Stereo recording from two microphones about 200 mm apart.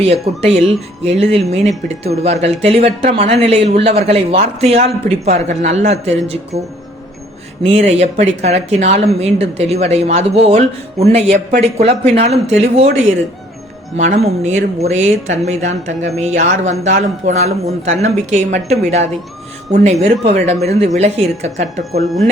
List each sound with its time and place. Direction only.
0.0 s speech: 30° right (ahead or behind)
7.6 s speech: 30° right (ahead or behind)
13.9 s speech: 35° right (ahead or behind)
22.0 s speech: centre (ahead or behind)